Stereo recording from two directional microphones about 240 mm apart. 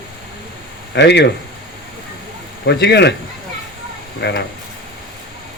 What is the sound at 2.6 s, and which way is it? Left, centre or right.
Speech, left.